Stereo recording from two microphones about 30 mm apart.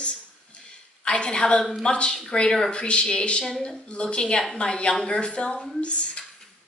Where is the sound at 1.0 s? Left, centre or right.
Left.